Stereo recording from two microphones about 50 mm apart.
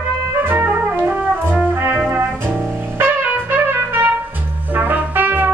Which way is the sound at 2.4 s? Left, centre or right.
Right.